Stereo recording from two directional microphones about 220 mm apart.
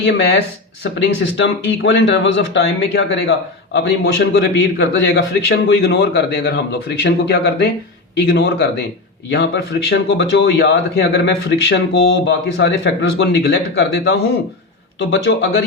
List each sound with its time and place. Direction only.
0.0 s speech: 50° left (ahead or behind)
1.4 s speech: 55° left (ahead or behind)
9.9 s speech: 55° left (ahead or behind)